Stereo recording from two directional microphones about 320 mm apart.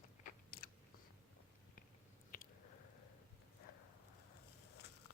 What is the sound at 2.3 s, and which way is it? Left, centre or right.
Squish, left.